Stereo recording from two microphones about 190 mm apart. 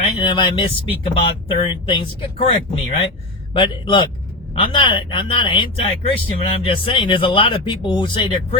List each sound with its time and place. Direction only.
0.0 s speech: 25° left (ahead or behind)